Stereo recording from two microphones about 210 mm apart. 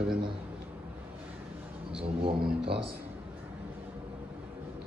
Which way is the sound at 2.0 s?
25° right (ahead or behind).